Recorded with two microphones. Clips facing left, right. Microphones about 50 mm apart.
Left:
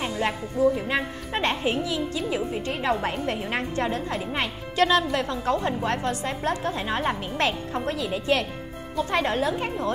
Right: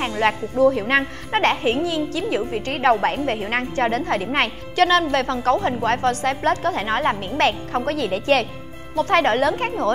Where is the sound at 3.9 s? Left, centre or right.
Right.